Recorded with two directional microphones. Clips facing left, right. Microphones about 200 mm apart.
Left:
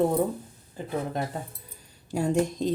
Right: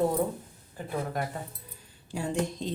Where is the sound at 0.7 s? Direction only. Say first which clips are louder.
Left 2 dB; 25° left (ahead or behind).